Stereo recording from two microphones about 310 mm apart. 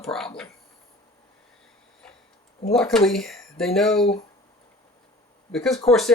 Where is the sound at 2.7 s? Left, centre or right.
Centre.